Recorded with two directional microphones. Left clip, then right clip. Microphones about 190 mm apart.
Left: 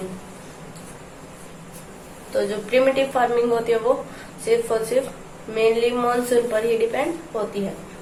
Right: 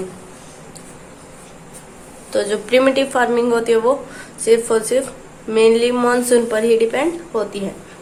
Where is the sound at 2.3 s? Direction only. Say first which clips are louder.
Right 5 dB; 50° right (ahead or behind).